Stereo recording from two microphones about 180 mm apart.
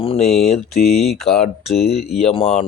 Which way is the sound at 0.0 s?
30° left (ahead or behind).